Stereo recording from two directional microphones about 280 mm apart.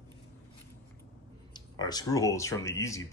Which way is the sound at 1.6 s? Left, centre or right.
Centre.